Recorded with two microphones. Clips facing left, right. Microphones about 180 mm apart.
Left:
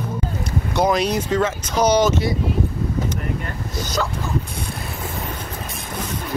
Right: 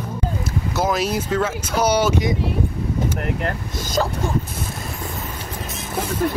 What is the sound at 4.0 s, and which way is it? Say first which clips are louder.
Speech: right 3 dB; 40° right (ahead or behind).